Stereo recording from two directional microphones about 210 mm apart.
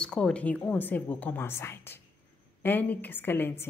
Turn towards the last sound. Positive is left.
turn(degrees=10)  # may be behind; listen again after turning